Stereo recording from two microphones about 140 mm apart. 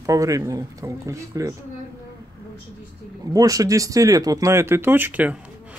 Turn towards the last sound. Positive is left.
turn(degrees=-10)  # may be behind; listen again after turning